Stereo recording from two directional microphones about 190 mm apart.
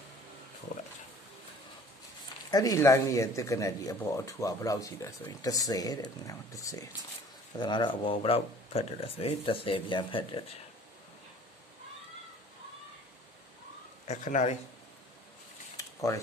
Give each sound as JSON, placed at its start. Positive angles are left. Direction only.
{"t": 2.5, "sound": "speech", "side_deg": 20}
{"t": 14.0, "sound": "speech", "side_deg": 40}
{"t": 15.8, "sound": "a sound", "side_deg": 15}